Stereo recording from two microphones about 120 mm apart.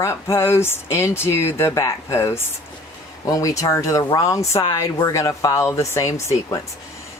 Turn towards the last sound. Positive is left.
turn(degrees=25)  # may be behind; listen again after turning